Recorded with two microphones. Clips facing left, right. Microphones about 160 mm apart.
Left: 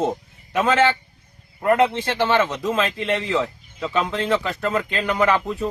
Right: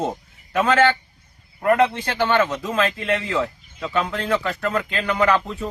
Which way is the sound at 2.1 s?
Centre (ahead or behind).